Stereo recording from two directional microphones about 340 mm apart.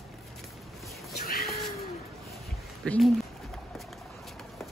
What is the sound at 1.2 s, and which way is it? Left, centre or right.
Cat, left.